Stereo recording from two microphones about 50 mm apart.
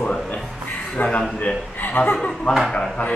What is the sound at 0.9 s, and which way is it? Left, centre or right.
Speech, left.